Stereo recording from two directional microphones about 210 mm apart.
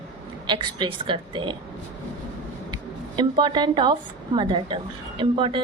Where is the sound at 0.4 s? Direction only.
20° right (ahead or behind).